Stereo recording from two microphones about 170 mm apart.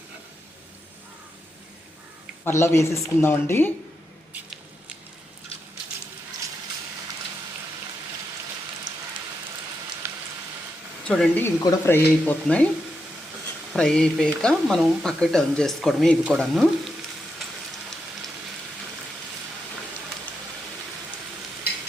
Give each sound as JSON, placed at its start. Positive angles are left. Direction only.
{"t": 2.4, "sound": "speech", "side_deg": 15}
{"t": 10.0, "sound": "a sound", "side_deg": -15}
{"t": 11.0, "sound": "speech", "side_deg": 5}
{"t": 13.7, "sound": "speech", "side_deg": 5}